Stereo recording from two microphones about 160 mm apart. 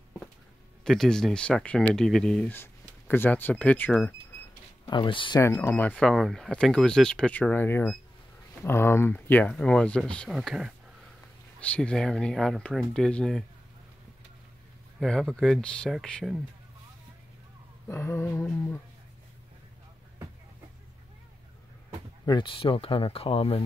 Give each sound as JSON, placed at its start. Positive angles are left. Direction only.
{"t": 0.8, "sound": "speech", "side_deg": 5}
{"t": 4.8, "sound": "speech", "side_deg": 30}
{"t": 5.4, "sound": "speech", "side_deg": 15}
{"t": 11.6, "sound": "speech", "side_deg": 5}
{"t": 15.0, "sound": "speech", "side_deg": 0}
{"t": 17.8, "sound": "speech", "side_deg": 15}
{"t": 22.2, "sound": "speech", "side_deg": 30}